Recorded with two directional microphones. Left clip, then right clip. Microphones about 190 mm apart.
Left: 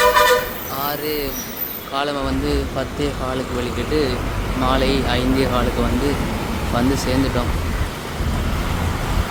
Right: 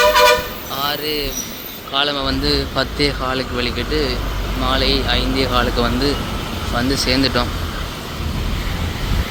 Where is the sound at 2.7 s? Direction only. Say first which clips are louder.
Right 5 dB; centre (ahead or behind).